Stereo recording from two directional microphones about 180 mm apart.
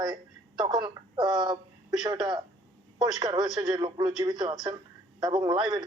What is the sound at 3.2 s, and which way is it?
A woman's voice, 25° right (ahead or behind).